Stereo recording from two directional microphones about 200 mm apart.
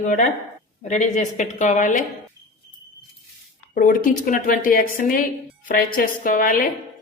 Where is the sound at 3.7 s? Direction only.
40° left (ahead or behind).